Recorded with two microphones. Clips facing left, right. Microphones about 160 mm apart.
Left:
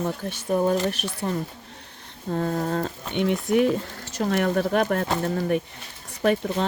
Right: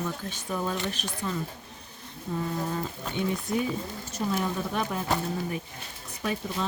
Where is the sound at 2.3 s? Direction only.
60° left (ahead or behind).